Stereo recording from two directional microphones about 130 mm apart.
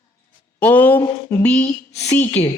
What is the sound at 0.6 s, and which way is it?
A man's voice, 15° left (ahead or behind).